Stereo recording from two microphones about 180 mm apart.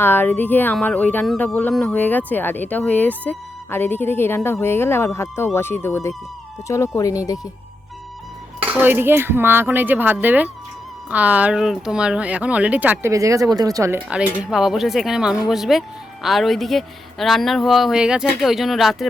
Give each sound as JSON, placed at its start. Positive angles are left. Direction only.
{"t": 0.0, "sound": "speech", "side_deg": 10}
{"t": 8.6, "sound": "speech", "side_deg": -10}
{"t": 14.5, "sound": "speech", "side_deg": 0}